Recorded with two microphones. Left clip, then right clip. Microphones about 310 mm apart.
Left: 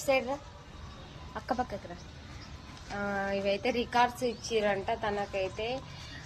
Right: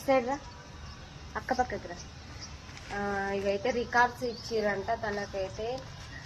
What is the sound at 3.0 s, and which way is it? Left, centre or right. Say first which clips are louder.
A woman's voice: even; centre.